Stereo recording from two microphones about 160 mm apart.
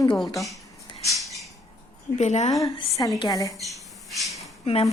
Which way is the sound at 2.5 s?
20° left (ahead or behind).